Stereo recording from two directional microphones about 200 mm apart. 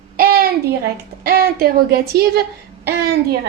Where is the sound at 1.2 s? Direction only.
50° right (ahead or behind).